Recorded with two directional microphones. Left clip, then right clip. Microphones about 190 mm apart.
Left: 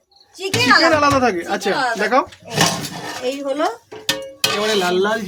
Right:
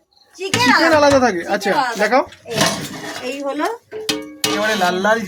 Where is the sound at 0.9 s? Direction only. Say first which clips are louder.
Right 2 dB; centre (ahead or behind).